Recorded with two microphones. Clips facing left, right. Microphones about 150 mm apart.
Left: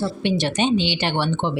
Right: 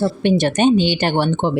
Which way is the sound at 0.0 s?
50° right (ahead or behind).